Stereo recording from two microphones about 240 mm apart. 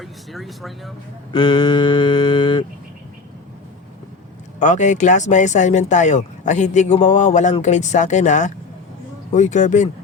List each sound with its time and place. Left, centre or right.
0.0 s speech: centre
1.3 s mantra: left
4.6 s speech: left